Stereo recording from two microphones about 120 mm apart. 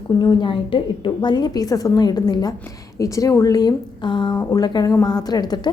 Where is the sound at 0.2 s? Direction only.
40° left (ahead or behind).